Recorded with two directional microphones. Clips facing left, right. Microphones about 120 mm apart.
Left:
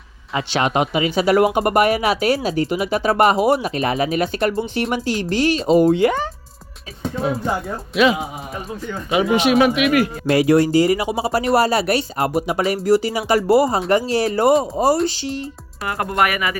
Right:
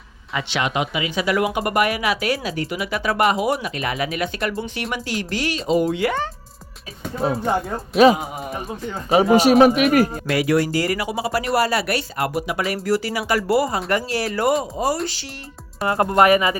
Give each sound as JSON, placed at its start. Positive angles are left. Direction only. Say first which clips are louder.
{"t": 0.3, "sound": "speech", "louder": "left 4 dB", "side_deg": 40}
{"t": 7.2, "sound": "speech", "louder": "right 2 dB", "side_deg": -35}
{"t": 10.2, "sound": "speech", "louder": "left 5 dB", "side_deg": 30}
{"t": 15.8, "sound": "speech", "louder": "right 4 dB", "side_deg": -25}